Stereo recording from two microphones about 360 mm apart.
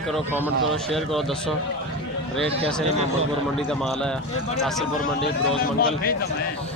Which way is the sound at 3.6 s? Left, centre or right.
Centre.